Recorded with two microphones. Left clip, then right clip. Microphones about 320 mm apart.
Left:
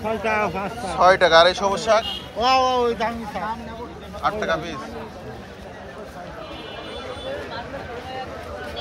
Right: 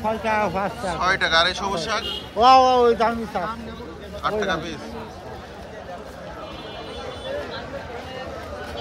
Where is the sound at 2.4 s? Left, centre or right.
Right.